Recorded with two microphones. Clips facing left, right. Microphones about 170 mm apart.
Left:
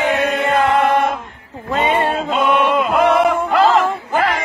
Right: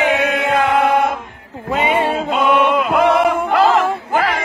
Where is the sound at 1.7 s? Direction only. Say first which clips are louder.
Even; 5° right (ahead or behind).